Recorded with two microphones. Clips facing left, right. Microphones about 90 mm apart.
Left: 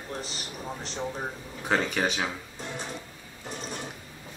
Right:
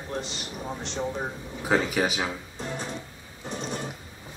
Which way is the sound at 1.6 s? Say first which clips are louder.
Right 2 dB; 5° right (ahead or behind).